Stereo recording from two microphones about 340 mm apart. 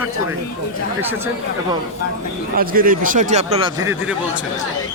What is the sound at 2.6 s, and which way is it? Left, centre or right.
Speech, right.